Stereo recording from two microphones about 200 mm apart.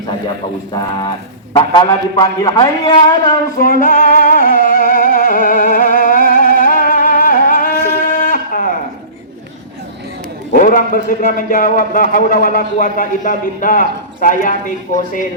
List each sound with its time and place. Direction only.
0.7 s a man's voice: 20° left (ahead or behind)
3.8 s music: 40° left (ahead or behind)
10.5 s a man's voice: 45° left (ahead or behind)